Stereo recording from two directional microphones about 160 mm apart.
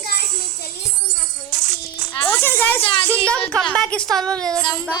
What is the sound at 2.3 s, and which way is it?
A woman's voice, 15° left (ahead or behind).